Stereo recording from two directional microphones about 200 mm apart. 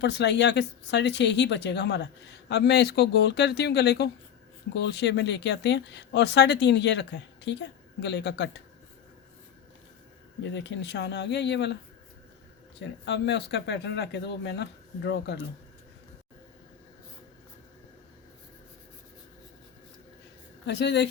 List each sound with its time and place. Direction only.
0.0 s speech: 60° left (ahead or behind)
10.5 s speech: 60° left (ahead or behind)
13.1 s speech: 60° left (ahead or behind)
20.7 s speech: 60° left (ahead or behind)